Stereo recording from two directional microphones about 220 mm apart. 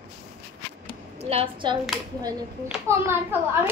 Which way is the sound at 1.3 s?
25° right (ahead or behind).